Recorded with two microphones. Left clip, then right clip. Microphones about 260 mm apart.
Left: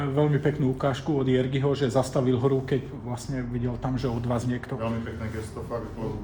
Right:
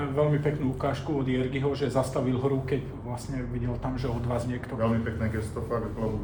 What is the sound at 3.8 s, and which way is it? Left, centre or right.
Speech, left.